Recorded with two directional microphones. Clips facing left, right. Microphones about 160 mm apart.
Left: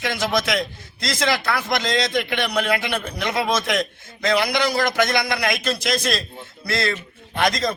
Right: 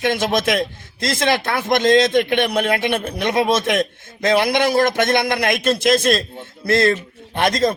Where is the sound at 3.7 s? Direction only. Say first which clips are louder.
Right 4 dB; 55° right (ahead or behind).